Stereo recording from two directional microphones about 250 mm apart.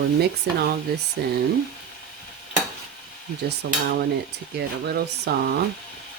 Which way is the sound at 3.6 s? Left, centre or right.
Right.